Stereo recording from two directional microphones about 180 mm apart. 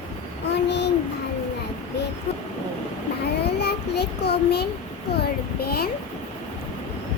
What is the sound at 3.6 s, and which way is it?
Child singing, 65° left (ahead or behind).